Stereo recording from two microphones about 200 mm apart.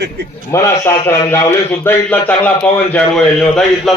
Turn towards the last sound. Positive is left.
turn(degrees=0)  # may be behind; listen again after turning